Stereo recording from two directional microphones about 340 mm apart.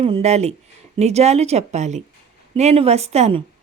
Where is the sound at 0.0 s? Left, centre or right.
Centre.